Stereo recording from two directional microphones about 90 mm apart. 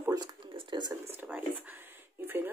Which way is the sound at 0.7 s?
55° right (ahead or behind).